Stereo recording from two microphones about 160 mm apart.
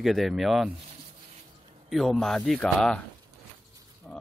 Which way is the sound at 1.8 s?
Centre (ahead or behind).